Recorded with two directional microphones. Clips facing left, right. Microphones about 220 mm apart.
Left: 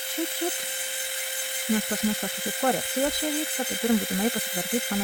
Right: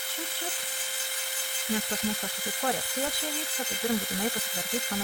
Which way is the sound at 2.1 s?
25° left (ahead or behind).